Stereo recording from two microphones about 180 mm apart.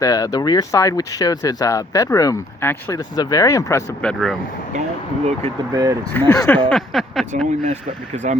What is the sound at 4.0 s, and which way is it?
Speech, 5° left (ahead or behind).